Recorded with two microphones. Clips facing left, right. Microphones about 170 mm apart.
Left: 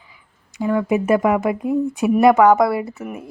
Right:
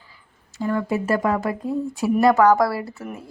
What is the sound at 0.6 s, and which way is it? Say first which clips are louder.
A woman's voice: left 4 dB; 15° left (ahead or behind).